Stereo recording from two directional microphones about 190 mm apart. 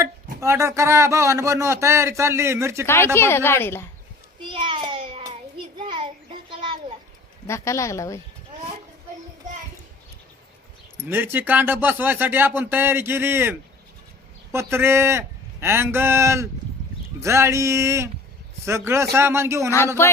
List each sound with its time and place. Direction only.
0.0 s a man's voice: 15° right (ahead or behind)
2.8 s speech: 15° left (ahead or behind)
4.4 s child singing: 25° right (ahead or behind)
5.8 s a sound: 25° right (ahead or behind)
7.4 s speech: 15° left (ahead or behind)
11.1 s a man's voice: 10° right (ahead or behind)